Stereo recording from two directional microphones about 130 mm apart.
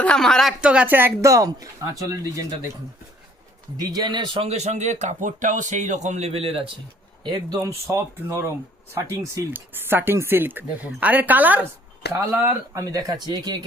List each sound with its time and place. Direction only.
0.0 s speech: 5° left (ahead or behind)
0.6 s speech: 10° right (ahead or behind); by 2.6 s 25° right (ahead or behind)
3.8 s speech: 30° right (ahead or behind)
4.4 s a man's voice: 55° right (ahead or behind)
7.3 s speech: 30° right (ahead or behind)